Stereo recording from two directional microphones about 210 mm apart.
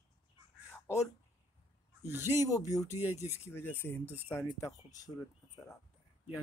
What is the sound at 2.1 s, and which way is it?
Speech, 10° right (ahead or behind).